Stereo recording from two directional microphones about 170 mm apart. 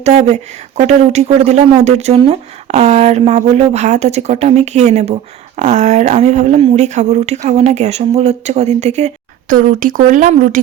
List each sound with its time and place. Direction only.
0.0 s speech: 40° right (ahead or behind)